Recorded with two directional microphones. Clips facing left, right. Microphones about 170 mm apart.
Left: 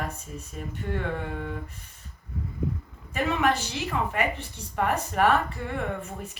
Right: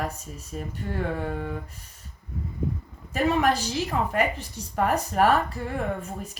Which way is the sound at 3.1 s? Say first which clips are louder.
Right 2 dB; 40° right (ahead or behind).